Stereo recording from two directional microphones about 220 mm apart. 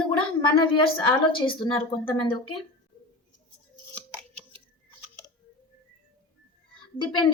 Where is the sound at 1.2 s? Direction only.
20° left (ahead or behind).